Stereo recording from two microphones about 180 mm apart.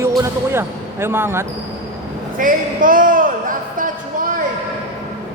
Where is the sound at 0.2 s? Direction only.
15° right (ahead or behind).